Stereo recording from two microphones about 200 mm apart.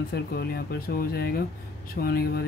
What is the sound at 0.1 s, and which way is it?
Speech, 50° left (ahead or behind).